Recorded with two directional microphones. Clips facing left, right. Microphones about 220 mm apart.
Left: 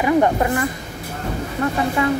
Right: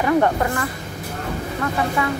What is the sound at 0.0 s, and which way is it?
Speech, 15° left (ahead or behind).